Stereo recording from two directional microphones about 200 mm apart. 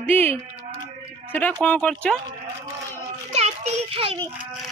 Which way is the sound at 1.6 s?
5° left (ahead or behind).